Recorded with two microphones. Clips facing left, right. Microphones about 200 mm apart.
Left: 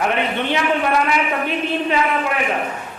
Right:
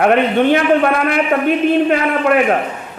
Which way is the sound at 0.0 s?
55° right (ahead or behind).